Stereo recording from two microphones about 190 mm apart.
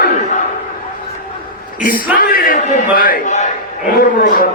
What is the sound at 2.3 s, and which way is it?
A man's voice, 50° left (ahead or behind).